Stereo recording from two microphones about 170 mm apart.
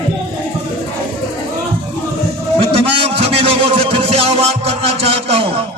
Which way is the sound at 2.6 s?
35° right (ahead or behind).